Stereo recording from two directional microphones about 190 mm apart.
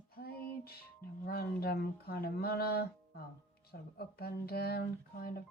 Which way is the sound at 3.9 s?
55° left (ahead or behind).